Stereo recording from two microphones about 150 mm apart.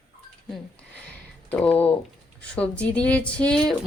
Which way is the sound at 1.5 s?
5° left (ahead or behind).